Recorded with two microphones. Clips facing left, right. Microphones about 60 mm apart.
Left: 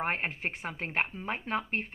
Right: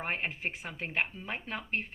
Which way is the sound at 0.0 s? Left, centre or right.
Left.